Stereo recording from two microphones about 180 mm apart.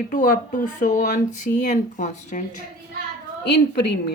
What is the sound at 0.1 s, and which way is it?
Speech, 45° left (ahead or behind).